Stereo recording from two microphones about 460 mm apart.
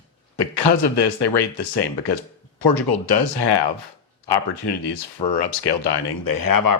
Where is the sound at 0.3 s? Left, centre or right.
Left.